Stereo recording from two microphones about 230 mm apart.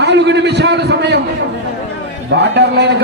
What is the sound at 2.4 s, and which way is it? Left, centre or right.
Speech, right.